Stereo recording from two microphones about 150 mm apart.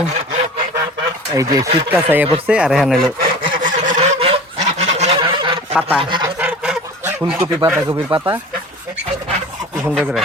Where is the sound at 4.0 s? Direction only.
45° right (ahead or behind).